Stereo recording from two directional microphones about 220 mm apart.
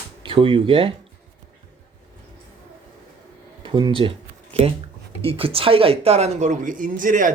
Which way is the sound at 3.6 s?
20° right (ahead or behind).